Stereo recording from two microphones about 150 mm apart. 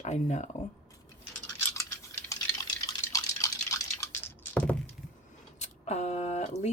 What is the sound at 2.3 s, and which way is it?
Liquid, 20° left (ahead or behind).